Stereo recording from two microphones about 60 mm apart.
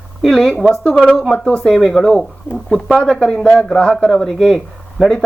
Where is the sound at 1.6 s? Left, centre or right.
Centre.